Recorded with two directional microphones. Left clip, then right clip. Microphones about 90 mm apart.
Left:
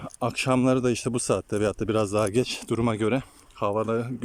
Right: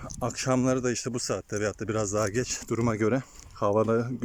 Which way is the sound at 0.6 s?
25° left (ahead or behind).